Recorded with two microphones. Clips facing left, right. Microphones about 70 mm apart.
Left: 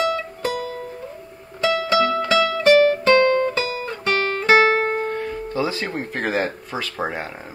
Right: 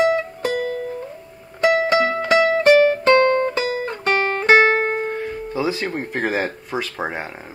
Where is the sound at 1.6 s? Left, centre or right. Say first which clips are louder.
Right 2 dB; right.